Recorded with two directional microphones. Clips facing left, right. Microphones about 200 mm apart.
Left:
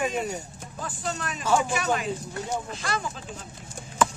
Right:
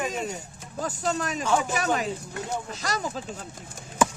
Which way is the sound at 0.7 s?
40° right (ahead or behind).